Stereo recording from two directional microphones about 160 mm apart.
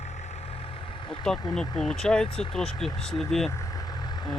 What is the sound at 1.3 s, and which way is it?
Speech, 5° left (ahead or behind).